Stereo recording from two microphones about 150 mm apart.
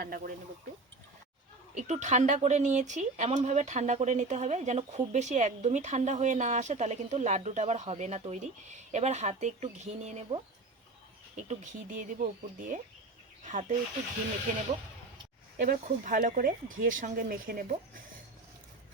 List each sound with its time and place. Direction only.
0.0 s speech: 75° right (ahead or behind)
1.7 s speech: 50° right (ahead or behind)
11.4 s speech: 55° right (ahead or behind)